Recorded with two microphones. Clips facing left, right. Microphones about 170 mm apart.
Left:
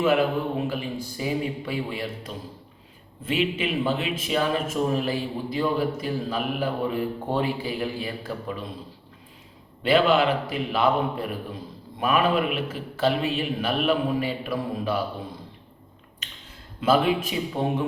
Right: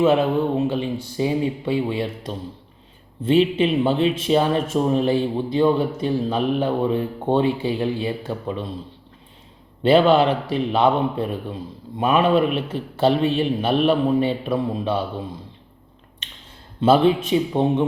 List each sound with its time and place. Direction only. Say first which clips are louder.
0.0 s a man's voice: right 4 dB; 25° right (ahead or behind)
9.8 s a man's voice: right 5 dB; 30° right (ahead or behind)
16.8 s a man's voice: right 5 dB; 30° right (ahead or behind)